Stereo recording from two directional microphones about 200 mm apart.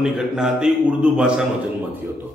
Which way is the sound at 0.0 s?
Centre (ahead or behind).